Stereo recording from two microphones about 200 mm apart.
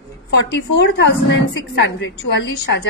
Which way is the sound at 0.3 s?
60° left (ahead or behind).